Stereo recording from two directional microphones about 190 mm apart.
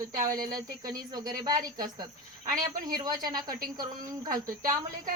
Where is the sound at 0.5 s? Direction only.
20° right (ahead or behind).